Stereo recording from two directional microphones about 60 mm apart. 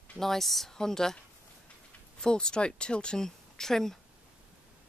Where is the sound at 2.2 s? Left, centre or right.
Centre.